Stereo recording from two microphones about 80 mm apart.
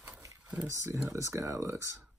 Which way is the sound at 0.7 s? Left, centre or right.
Right.